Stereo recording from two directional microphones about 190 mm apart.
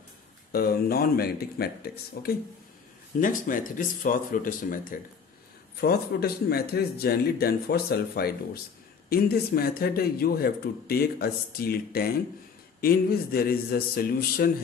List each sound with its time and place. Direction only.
0.5 s a man's voice: 55° left (ahead or behind)